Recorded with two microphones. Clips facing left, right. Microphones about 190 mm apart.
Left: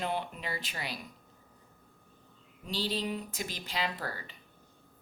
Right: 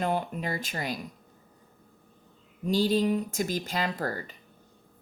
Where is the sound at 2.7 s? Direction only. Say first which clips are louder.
Right 10 dB; 45° right (ahead or behind).